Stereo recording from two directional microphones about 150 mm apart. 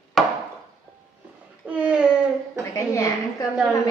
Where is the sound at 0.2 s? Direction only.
Centre (ahead or behind).